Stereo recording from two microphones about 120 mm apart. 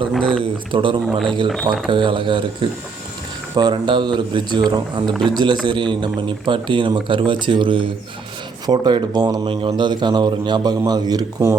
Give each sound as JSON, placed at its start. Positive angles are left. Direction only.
{"t": 0.1, "sound": "speech", "side_deg": 10}
{"t": 0.7, "sound": "speech", "side_deg": -45}
{"t": 1.5, "sound": "speech", "side_deg": 0}
{"t": 1.9, "sound": "a man's voice", "side_deg": -40}